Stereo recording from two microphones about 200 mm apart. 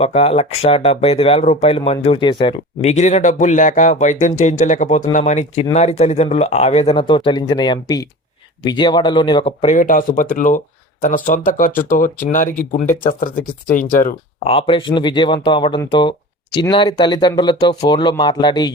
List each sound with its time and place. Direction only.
0.0 s speech: 30° left (ahead or behind)
9.7 s speech: 40° left (ahead or behind)
14.4 s speech: 25° left (ahead or behind)